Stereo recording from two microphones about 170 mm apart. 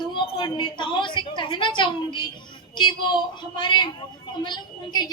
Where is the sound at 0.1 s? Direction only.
30° left (ahead or behind).